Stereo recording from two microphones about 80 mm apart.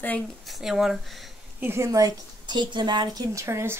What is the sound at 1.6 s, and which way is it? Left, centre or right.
Speech, right.